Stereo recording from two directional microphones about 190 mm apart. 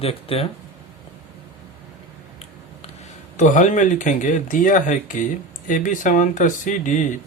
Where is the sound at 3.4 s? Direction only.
40° left (ahead or behind).